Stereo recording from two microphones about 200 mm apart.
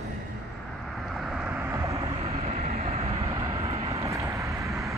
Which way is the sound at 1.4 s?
15° right (ahead or behind).